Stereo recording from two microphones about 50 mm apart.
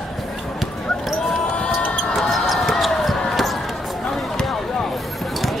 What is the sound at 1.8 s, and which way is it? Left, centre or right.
Basketball bounce, left.